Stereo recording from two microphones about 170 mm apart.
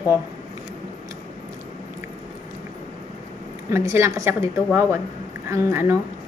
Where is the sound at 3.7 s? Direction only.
15° right (ahead or behind).